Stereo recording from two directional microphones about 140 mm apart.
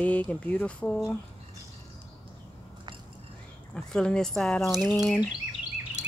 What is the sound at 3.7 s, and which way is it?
Speech, 5° left (ahead or behind).